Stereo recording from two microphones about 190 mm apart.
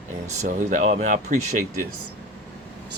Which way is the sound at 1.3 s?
40° right (ahead or behind).